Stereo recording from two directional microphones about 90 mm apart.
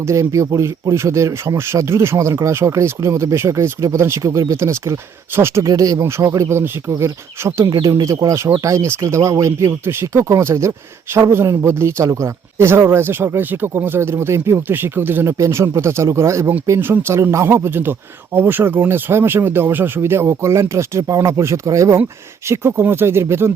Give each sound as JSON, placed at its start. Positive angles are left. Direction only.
{"t": 0.0, "sound": "speech", "side_deg": -35}
{"t": 5.6, "sound": "speech", "side_deg": -40}
{"t": 7.6, "sound": "speech", "side_deg": -45}